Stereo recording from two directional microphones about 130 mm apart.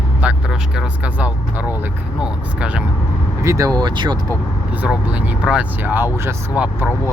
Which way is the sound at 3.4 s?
25° right (ahead or behind).